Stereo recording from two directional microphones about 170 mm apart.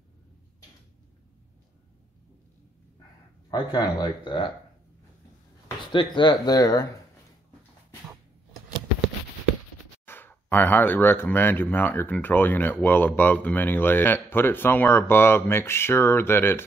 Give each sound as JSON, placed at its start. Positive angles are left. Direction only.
{"t": 3.4, "sound": "speech", "side_deg": 25}
{"t": 5.9, "sound": "speech", "side_deg": 30}
{"t": 10.0, "sound": "speech", "side_deg": 10}